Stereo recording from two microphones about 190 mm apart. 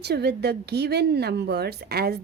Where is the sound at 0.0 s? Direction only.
60° right (ahead or behind).